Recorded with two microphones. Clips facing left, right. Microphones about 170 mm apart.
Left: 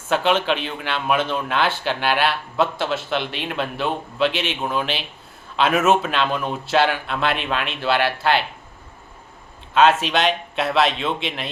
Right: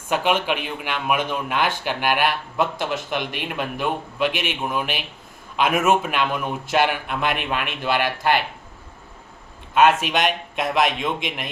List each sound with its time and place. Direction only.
0.1 s speech: 10° right (ahead or behind)
9.7 s speech: 15° right (ahead or behind)